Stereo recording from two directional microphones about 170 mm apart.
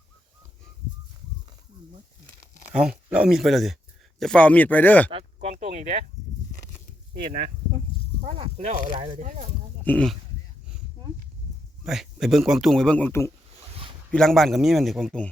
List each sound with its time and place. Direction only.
2.7 s speech: 5° right (ahead or behind)
5.1 s speech: 40° right (ahead or behind)
7.1 s speech: 60° right (ahead or behind)
8.2 s speech: 40° right (ahead or behind)
9.8 s speech: 5° left (ahead or behind)
11.8 s speech: centre (ahead or behind); by 13.3 s 15° left (ahead or behind)
14.1 s speech: 5° left (ahead or behind)